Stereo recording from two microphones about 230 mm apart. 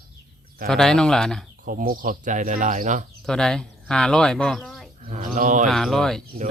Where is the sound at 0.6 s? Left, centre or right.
Centre.